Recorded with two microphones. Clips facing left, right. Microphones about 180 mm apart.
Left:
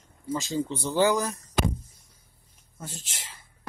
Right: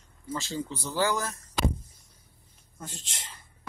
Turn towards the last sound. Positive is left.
turn(degrees=5)  # may be behind; listen again after turning